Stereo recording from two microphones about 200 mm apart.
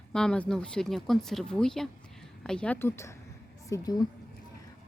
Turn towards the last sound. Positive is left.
turn(degrees=20)  # may be behind; listen again after turning